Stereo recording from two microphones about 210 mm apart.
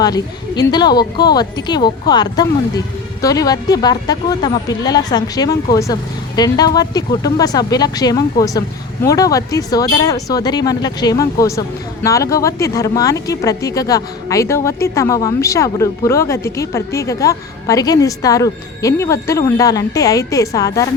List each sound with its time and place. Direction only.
0.0 s a woman's voice: 20° left (ahead or behind)